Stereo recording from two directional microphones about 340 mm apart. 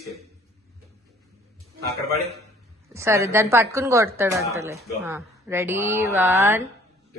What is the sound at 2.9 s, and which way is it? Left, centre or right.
A woman's voice, centre.